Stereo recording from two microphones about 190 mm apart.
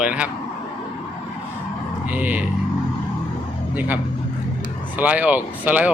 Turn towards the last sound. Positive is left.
turn(degrees=-10)  # may be behind; listen again after turning